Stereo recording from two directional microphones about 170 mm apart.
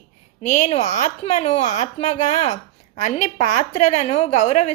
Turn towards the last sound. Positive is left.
turn(degrees=45)  # may be behind; listen again after turning